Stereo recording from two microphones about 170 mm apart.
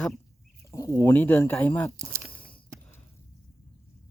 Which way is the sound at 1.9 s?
15° right (ahead or behind).